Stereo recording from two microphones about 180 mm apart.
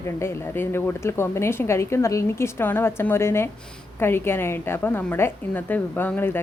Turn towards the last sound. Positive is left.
turn(degrees=10)  # may be behind; listen again after turning